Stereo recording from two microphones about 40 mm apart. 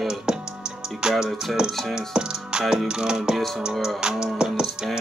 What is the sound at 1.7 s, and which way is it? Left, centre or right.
Speech, centre.